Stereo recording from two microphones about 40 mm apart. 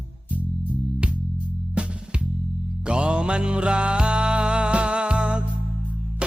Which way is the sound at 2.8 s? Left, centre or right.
Right.